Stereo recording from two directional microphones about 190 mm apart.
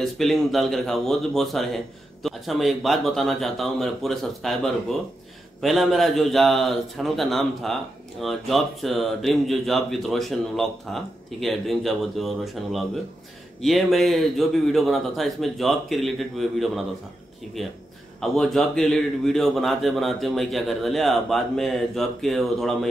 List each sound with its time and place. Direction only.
0.0 s a man's voice: centre (ahead or behind)
18.2 s a man's voice: centre (ahead or behind)